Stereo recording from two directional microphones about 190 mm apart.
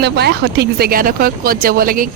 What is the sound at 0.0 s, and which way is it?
Speech, 60° right (ahead or behind).